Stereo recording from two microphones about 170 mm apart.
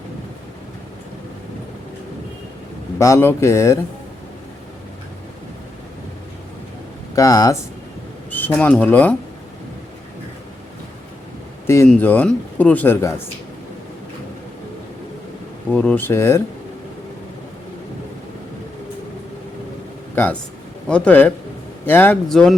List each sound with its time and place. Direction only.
3.0 s speech: 15° left (ahead or behind)
7.2 s speech: 20° left (ahead or behind)
11.6 s speech: 15° left (ahead or behind)
15.7 s speech: 10° left (ahead or behind)
20.8 s speech: 5° left (ahead or behind)